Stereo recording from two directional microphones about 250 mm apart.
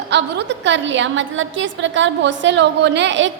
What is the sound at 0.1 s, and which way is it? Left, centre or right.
A woman's voice, right.